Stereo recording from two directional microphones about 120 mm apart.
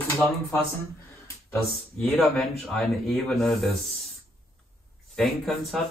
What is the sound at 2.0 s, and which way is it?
Speech, 10° left (ahead or behind).